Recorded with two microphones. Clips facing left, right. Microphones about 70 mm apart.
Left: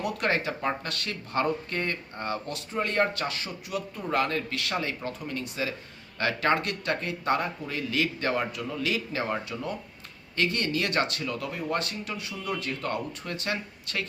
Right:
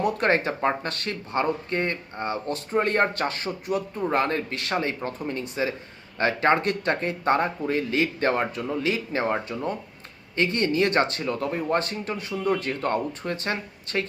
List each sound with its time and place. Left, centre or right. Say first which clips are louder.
0.0 s speech: right 5 dB; right
2.6 s speech: right 5 dB; right